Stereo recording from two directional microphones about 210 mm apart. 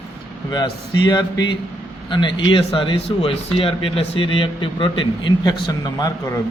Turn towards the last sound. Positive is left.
turn(degrees=20)  # may be behind; listen again after turning